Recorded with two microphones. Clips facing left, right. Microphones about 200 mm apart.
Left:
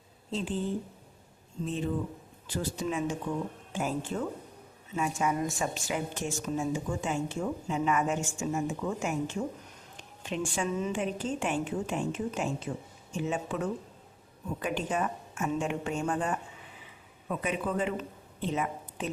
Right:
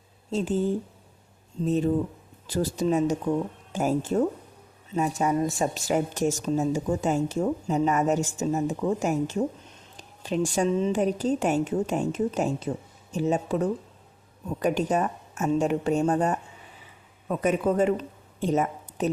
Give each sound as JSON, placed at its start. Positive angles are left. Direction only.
{"t": 0.3, "sound": "a woman's voice", "side_deg": -45}